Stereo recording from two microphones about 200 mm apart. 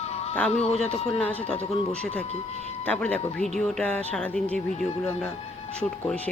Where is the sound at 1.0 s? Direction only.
5° left (ahead or behind).